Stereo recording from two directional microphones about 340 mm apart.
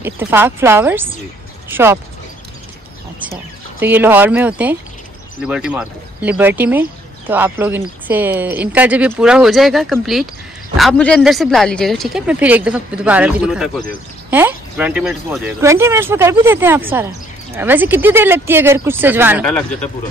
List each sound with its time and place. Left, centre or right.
0.0 s speech: centre
3.8 s speech: centre